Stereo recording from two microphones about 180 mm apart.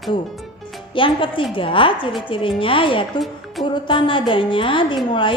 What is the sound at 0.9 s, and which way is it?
A woman's voice, 30° left (ahead or behind).